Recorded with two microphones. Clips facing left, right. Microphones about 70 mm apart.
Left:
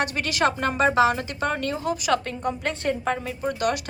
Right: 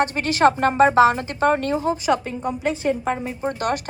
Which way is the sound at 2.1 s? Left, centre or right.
Centre.